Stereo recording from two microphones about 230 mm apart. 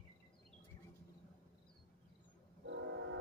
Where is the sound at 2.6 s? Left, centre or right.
Right.